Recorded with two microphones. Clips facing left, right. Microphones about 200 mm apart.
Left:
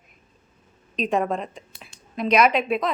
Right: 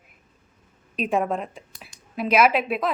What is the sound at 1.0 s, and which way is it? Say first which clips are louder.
A woman's voice: even; 5° right (ahead or behind).